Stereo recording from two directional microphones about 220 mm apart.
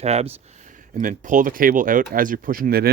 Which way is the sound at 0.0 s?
30° right (ahead or behind).